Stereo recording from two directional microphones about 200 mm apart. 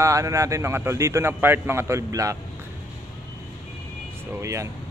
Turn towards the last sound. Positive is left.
turn(degrees=-15)  # may be behind; listen again after turning